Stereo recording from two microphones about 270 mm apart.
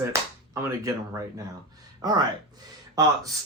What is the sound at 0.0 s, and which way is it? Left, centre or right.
Speech, centre.